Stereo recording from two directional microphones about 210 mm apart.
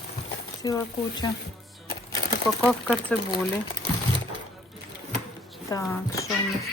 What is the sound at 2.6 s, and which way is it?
Speech, 5° left (ahead or behind).